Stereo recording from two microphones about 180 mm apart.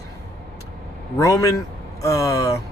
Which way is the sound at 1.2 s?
20° left (ahead or behind).